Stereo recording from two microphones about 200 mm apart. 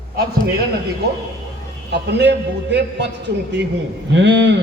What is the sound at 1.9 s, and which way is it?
A man's voice, 55° right (ahead or behind).